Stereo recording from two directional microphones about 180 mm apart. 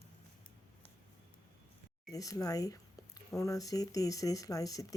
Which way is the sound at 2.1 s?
20° left (ahead or behind).